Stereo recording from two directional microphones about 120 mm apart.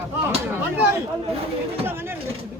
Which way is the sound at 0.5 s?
15° right (ahead or behind).